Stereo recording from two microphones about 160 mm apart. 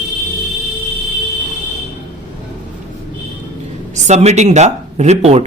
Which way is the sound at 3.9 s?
45° right (ahead or behind).